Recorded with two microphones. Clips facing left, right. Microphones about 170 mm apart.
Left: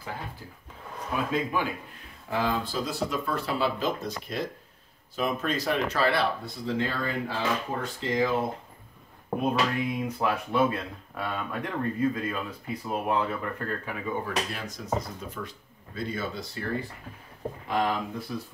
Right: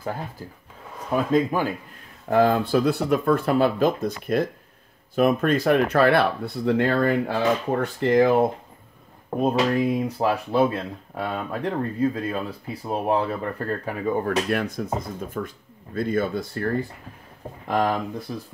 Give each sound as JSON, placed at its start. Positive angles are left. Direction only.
{"t": 1.1, "sound": "speech", "side_deg": -40}
{"t": 2.2, "sound": "speech", "side_deg": -55}
{"t": 9.4, "sound": "speech", "side_deg": -40}
{"t": 14.5, "sound": "speech", "side_deg": -60}
{"t": 17.6, "sound": "speech", "side_deg": -45}